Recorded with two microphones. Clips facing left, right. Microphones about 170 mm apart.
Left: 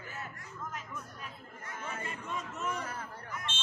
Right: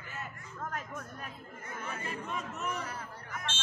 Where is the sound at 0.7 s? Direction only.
50° right (ahead or behind).